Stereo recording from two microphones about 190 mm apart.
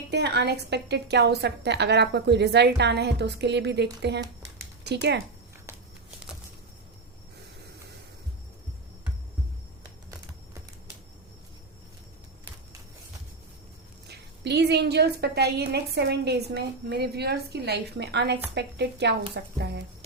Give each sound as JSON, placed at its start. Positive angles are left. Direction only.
{"t": 0.1, "sound": "a woman's voice", "side_deg": -60}
{"t": 14.1, "sound": "a woman's voice", "side_deg": -60}